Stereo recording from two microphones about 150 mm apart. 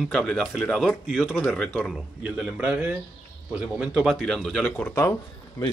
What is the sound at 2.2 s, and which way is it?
A man's voice, 10° right (ahead or behind).